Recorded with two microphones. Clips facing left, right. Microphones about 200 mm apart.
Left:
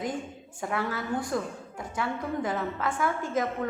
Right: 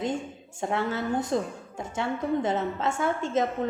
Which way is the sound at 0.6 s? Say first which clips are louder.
Right 3 dB; 25° right (ahead or behind).